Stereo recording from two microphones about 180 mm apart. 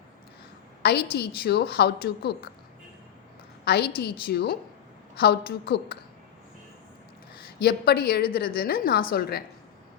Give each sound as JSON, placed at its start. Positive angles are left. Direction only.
{"t": 0.8, "sound": "a woman's voice", "side_deg": 65}
{"t": 3.6, "sound": "a woman's voice", "side_deg": 65}
{"t": 7.6, "sound": "a woman's voice", "side_deg": 60}